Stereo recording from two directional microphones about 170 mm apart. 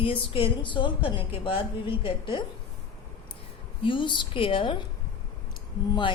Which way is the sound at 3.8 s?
30° left (ahead or behind).